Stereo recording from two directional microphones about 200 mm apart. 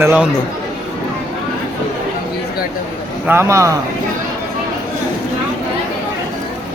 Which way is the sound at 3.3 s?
15° right (ahead or behind).